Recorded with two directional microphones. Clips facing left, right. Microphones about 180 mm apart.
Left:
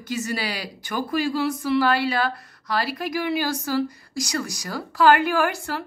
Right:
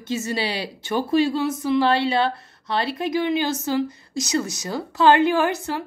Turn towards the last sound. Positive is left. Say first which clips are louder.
# right 2 dB
turn(degrees=-20)  # may be behind; listen again after turning